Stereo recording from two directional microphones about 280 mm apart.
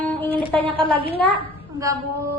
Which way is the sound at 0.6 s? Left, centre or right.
Centre.